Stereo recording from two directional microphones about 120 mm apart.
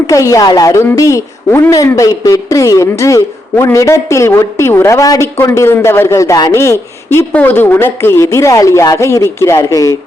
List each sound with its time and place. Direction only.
0.1 s a woman's voice: 25° left (ahead or behind)